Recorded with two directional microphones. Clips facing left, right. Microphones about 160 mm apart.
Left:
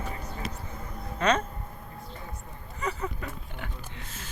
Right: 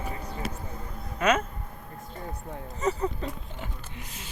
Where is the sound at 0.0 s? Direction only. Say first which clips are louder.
Right 2 dB; 10° right (ahead or behind).